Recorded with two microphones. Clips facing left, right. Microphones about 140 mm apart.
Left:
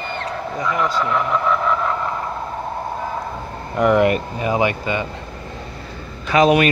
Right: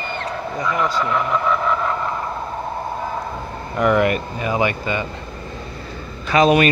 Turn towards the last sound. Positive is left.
turn(degrees=10)  # may be behind; listen again after turning